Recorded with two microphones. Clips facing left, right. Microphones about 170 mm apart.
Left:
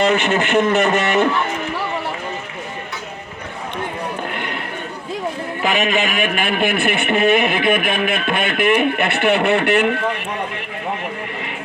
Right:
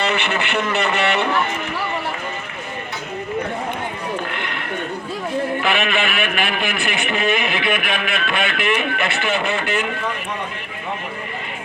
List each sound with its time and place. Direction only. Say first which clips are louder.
0.0 s a man's voice: left 5 dB; 45° left (ahead or behind)
5.6 s a man's voice: left 2 dB; 40° left (ahead or behind); by 9.8 s 65° left (ahead or behind)